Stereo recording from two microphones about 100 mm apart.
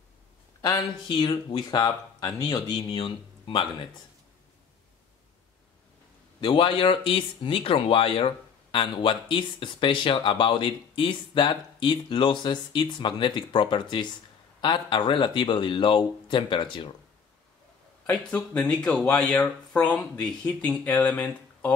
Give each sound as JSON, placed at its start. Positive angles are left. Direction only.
{"t": 0.6, "sound": "speech", "side_deg": 50}
{"t": 2.9, "sound": "speech", "side_deg": 55}
{"t": 6.4, "sound": "speech", "side_deg": 60}
{"t": 18.0, "sound": "speech", "side_deg": 15}